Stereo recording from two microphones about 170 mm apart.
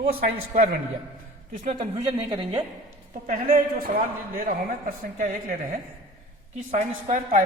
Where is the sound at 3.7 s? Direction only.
60° right (ahead or behind).